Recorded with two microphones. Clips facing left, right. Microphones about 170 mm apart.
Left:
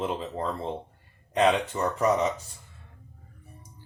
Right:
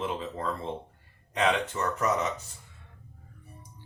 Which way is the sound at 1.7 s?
30° left (ahead or behind).